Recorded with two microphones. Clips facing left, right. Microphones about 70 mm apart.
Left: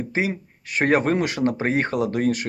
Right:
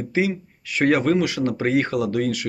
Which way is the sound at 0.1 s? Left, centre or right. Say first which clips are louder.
Right 5 dB; left.